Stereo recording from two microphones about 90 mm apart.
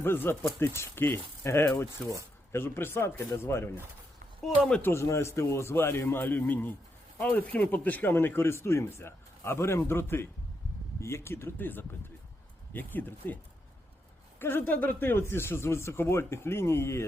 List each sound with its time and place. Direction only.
0.0 s speech: 25° left (ahead or behind)
4.8 s speech: 30° left (ahead or behind)